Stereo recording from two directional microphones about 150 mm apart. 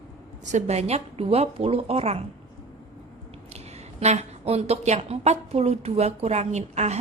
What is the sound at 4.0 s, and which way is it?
A woman's voice, 45° right (ahead or behind).